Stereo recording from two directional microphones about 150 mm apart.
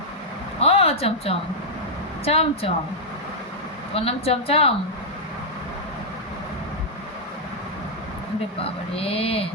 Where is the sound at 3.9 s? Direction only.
40° left (ahead or behind).